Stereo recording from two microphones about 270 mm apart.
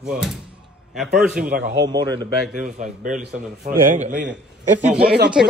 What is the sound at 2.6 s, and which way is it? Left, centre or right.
Speech, right.